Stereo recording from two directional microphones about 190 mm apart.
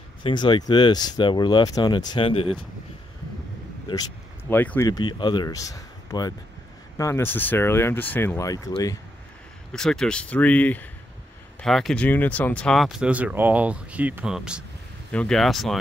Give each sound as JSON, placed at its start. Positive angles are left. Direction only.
{"t": 0.2, "sound": "speech", "side_deg": 25}
{"t": 4.5, "sound": "speech", "side_deg": 10}
{"t": 9.7, "sound": "speech", "side_deg": 0}